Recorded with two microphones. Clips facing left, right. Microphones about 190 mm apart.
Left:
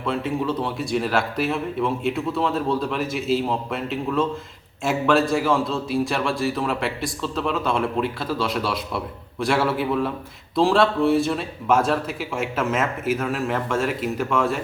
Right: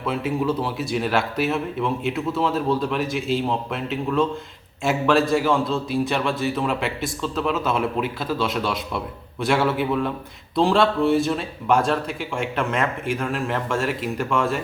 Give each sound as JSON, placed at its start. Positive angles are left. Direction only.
{"t": 0.0, "sound": "speech", "side_deg": -5}